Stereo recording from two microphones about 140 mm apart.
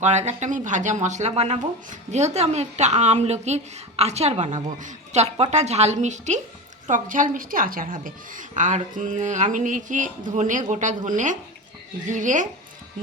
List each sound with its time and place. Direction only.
0.0 s speech: 55° right (ahead or behind)
6.8 s a woman's voice: 70° right (ahead or behind)
7.3 s a woman's voice: 85° right; by 12.5 s 65° right (ahead or behind)